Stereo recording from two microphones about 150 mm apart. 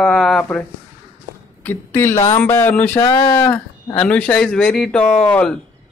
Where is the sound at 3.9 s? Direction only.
10° left (ahead or behind).